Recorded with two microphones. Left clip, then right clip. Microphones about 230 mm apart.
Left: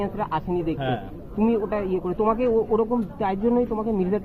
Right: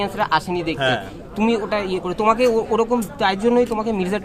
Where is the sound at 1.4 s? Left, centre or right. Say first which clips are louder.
Right 3 dB; centre.